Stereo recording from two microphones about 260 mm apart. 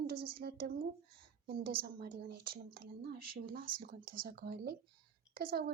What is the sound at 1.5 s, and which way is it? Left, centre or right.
Speech, right.